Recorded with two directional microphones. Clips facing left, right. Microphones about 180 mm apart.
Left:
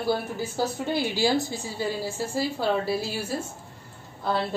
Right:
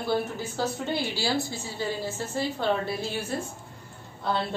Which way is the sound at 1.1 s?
15° left (ahead or behind).